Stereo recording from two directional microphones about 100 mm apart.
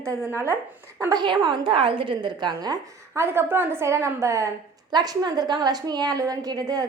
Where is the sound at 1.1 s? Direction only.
50° right (ahead or behind).